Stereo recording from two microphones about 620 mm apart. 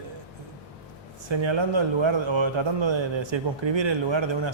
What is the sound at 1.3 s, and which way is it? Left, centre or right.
A man's voice, right.